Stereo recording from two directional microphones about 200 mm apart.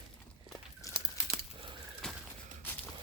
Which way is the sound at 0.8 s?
15° left (ahead or behind).